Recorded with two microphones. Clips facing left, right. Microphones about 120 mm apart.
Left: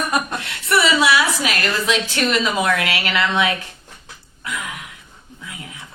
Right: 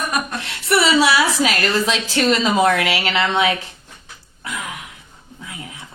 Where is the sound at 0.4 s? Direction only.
30° right (ahead or behind).